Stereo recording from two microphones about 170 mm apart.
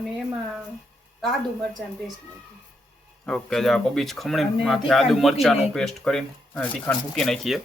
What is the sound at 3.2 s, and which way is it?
Speech, 5° left (ahead or behind).